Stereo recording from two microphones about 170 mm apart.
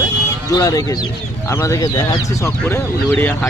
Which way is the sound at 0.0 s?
20° left (ahead or behind).